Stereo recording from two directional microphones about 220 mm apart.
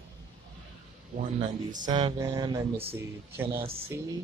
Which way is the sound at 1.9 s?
20° right (ahead or behind).